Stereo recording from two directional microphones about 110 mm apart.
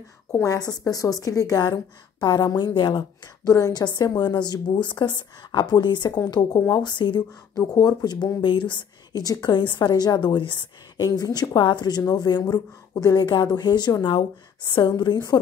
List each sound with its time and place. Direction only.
0.3 s a woman's voice: 30° left (ahead or behind); by 3.1 s 45° left (ahead or behind)
3.4 s a woman's voice: 35° left (ahead or behind)